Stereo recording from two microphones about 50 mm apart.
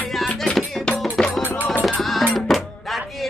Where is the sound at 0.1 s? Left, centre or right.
Centre.